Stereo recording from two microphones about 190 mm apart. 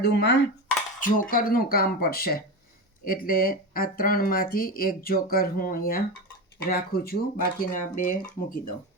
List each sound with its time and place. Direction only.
0.0 s dishes: 60° left (ahead or behind)
0.9 s speech: 45° left (ahead or behind)